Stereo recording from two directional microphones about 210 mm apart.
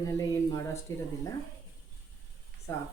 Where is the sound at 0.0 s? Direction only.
15° left (ahead or behind).